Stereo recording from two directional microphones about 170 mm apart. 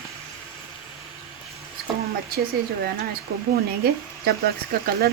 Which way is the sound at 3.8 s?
65° right (ahead or behind).